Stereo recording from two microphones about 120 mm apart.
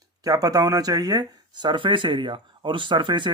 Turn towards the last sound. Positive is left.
turn(degrees=-40)  # may be behind; listen again after turning